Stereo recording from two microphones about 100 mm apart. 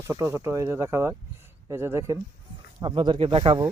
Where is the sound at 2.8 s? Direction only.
50° right (ahead or behind); by 3.6 s 65° right (ahead or behind).